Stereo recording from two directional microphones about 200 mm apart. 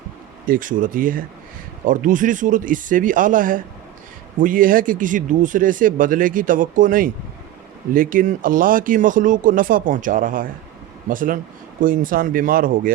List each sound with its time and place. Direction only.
0.4 s speech: 45° right (ahead or behind)